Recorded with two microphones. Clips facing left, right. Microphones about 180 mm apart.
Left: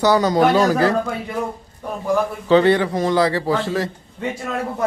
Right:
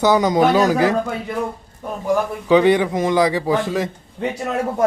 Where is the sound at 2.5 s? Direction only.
15° right (ahead or behind).